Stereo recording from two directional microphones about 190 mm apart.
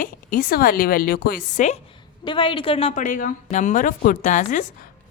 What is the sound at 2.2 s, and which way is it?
A woman's voice, 25° left (ahead or behind).